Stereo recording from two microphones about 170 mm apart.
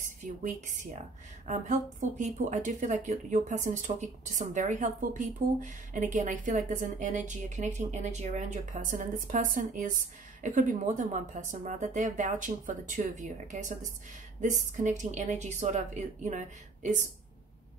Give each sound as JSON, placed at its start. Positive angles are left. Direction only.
{"t": 0.0, "sound": "a woman's voice", "side_deg": -50}